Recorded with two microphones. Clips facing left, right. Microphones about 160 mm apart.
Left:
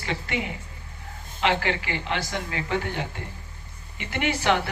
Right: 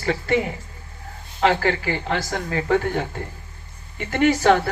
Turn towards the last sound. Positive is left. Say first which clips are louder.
# right 7 dB
turn(degrees=-40)  # may be behind; listen again after turning